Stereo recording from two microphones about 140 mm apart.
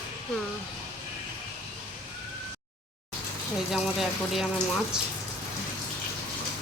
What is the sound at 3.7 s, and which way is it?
Speech, centre (ahead or behind).